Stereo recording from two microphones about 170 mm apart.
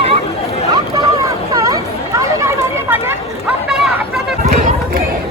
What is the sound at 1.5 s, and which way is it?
Chatter, 20° right (ahead or behind).